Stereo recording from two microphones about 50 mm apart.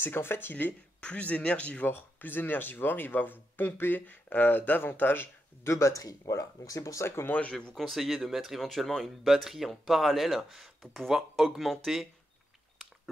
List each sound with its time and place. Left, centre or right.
0.0 s speech: left
1.0 s speech: left
1.9 s speech: left
6.8 s speech: left
7.2 s speech: left
7.7 s speech: centre
9.3 s speech: centre
10.8 s speech: centre